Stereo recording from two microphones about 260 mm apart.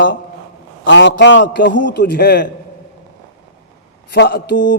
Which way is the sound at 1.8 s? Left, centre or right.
Left.